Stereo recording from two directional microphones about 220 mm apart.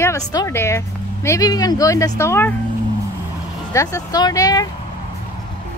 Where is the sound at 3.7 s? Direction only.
15° left (ahead or behind).